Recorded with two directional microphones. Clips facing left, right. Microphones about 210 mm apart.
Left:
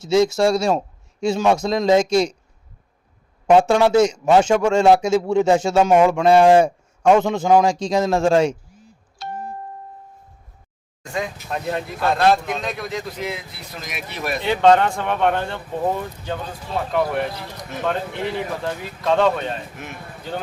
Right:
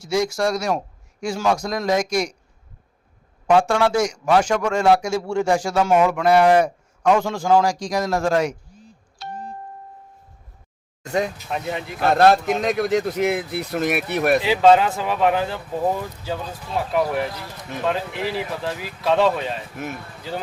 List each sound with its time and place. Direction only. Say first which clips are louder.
0.0 s a man's voice: left 5 dB; 25° left (ahead or behind)
3.5 s a man's voice: left 3 dB; 20° left (ahead or behind)
9.2 s doorbell: left 3 dB; 50° left (ahead or behind)
11.4 s speech: left 2 dB; centre (ahead or behind)
12.7 s speech: right 8 dB; 75° right (ahead or behind)
13.3 s speech: right 10 dB; 60° right (ahead or behind)
14.4 s speech: left 3 dB; 5° right (ahead or behind)